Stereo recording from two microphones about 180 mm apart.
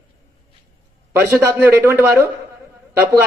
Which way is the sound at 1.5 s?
10° right (ahead or behind).